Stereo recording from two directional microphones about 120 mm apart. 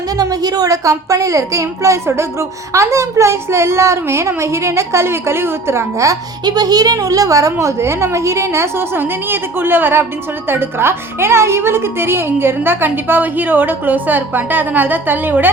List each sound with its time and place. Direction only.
0.2 s a child's voice: 30° right (ahead or behind); by 15.4 s 15° right (ahead or behind)